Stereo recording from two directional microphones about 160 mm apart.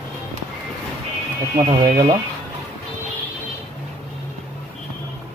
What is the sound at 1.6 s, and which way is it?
Speech, 45° right (ahead or behind).